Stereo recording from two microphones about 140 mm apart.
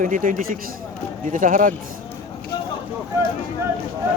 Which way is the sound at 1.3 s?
70° right (ahead or behind).